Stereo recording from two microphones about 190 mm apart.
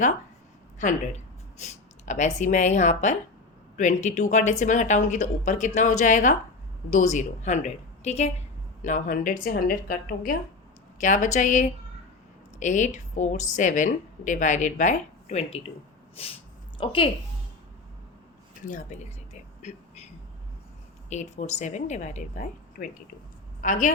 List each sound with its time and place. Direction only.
1.5 s a woman's voice: 40° left (ahead or behind)
18.7 s a sound: 40° left (ahead or behind)
21.1 s a woman's voice: 35° left (ahead or behind)